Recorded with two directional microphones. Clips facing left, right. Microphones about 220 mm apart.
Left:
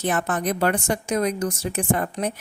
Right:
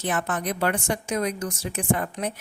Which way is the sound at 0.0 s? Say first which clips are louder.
Left 3 dB; 40° left (ahead or behind).